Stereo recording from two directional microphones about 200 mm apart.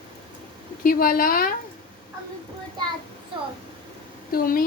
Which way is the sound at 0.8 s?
45° left (ahead or behind).